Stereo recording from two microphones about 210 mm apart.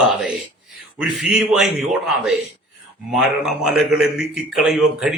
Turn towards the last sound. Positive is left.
turn(degrees=0)  # may be behind; listen again after turning